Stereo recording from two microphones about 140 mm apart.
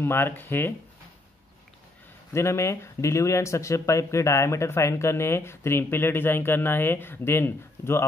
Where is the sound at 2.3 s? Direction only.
20° left (ahead or behind).